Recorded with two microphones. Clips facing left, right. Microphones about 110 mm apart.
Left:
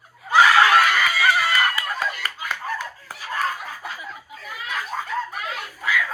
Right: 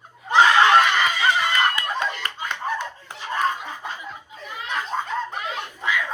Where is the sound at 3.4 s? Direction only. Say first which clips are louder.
Right 3 dB; 25° right (ahead or behind).